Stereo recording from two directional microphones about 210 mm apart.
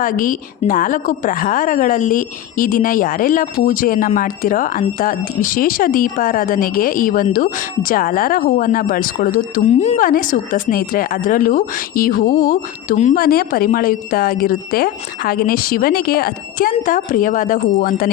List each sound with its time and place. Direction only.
0.0 s a woman's voice: 40° left (ahead or behind)